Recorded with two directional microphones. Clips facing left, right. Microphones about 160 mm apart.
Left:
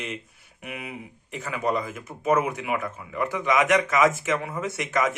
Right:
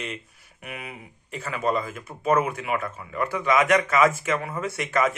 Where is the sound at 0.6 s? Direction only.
20° left (ahead or behind).